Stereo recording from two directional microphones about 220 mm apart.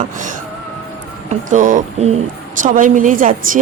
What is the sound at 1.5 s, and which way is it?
A woman's voice, 35° right (ahead or behind).